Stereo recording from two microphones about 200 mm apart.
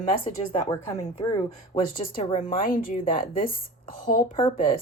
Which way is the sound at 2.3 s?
40° left (ahead or behind).